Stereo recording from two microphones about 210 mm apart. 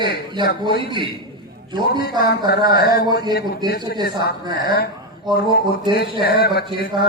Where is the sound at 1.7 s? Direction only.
20° right (ahead or behind).